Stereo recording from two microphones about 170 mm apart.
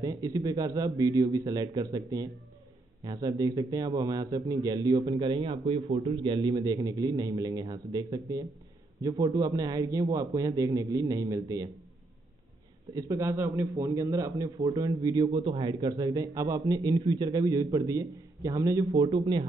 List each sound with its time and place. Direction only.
0.0 s a man's voice: 20° right (ahead or behind)
12.9 s a man's voice: 20° right (ahead or behind)